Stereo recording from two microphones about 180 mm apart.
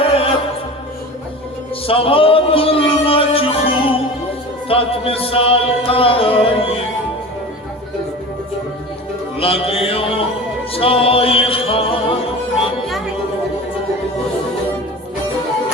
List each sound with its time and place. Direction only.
0.0 s music: 30° left (ahead or behind)
1.9 s music: 30° left (ahead or behind)
9.4 s music: 30° left (ahead or behind)